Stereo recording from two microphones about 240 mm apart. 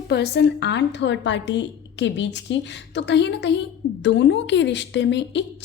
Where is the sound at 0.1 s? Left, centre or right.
Left.